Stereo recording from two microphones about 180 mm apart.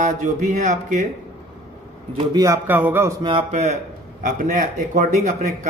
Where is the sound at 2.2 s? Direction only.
20° right (ahead or behind).